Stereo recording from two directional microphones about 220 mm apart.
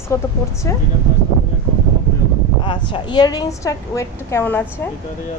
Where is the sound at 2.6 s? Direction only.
20° left (ahead or behind).